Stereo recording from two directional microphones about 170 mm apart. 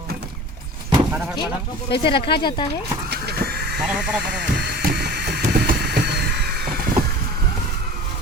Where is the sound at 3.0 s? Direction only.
70° right (ahead or behind).